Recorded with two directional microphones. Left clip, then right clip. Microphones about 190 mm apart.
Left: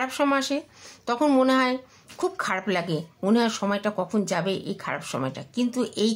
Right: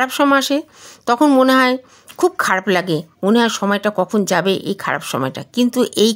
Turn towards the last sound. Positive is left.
turn(degrees=-50)  # may be behind; listen again after turning